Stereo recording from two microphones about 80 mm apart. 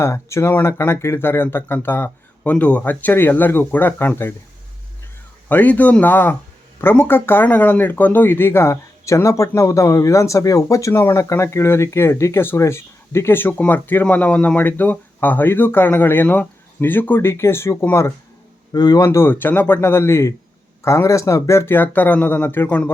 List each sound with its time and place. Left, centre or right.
0.0 s speech: left
5.5 s speech: left
18.7 s speech: left
19.0 s speech: left